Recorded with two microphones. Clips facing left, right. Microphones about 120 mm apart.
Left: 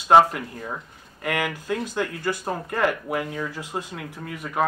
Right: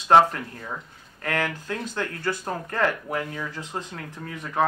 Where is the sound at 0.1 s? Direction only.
10° left (ahead or behind).